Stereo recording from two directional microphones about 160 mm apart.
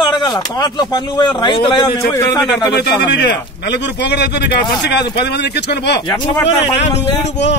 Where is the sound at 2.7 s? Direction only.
90° left.